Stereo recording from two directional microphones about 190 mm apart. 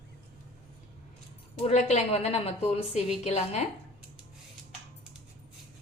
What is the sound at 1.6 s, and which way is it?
A woman's voice, 35° left (ahead or behind).